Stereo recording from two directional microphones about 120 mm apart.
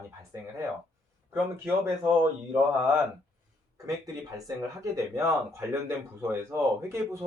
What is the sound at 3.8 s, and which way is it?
Speech, 30° right (ahead or behind).